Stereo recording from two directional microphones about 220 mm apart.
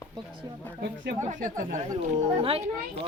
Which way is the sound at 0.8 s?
50° right (ahead or behind).